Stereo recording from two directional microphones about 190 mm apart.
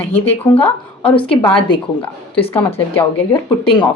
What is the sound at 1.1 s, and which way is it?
Speech, 25° left (ahead or behind).